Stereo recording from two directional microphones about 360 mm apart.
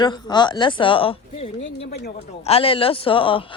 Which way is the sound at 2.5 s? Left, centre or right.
Centre.